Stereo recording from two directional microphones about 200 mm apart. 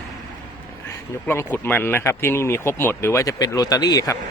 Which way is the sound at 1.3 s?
10° left (ahead or behind).